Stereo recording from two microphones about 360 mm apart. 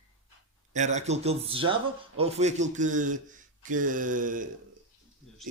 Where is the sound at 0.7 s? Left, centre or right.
Centre.